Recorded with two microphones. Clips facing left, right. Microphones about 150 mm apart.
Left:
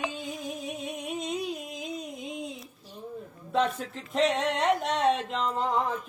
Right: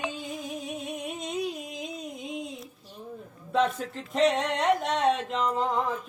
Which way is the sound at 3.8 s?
40° right (ahead or behind).